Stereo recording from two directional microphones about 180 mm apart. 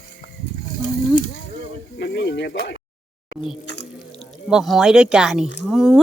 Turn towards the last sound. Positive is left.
turn(degrees=0)  # may be behind; listen again after turning